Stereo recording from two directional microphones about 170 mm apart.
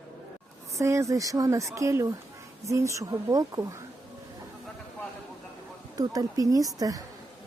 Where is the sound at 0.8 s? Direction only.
15° right (ahead or behind).